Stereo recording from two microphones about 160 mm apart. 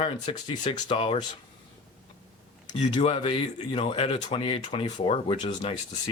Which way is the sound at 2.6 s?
30° left (ahead or behind).